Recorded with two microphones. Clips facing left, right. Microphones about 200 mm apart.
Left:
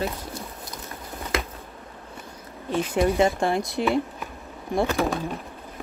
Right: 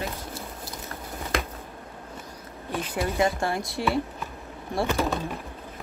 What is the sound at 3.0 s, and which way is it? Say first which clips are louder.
Speech: left 4 dB; 25° left (ahead or behind).